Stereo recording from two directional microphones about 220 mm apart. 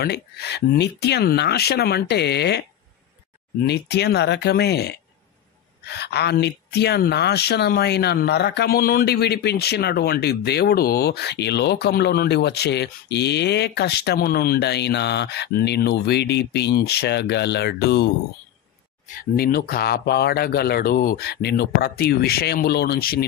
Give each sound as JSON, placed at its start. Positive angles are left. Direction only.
{"t": 0.0, "sound": "speech", "side_deg": 50}
{"t": 3.6, "sound": "speech", "side_deg": 50}